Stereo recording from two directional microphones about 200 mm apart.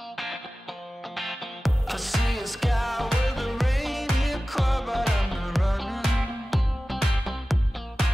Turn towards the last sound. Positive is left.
turn(degrees=0)  # may be behind; listen again after turning